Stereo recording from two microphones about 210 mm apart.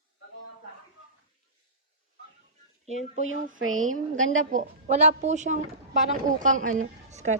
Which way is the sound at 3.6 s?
80° right.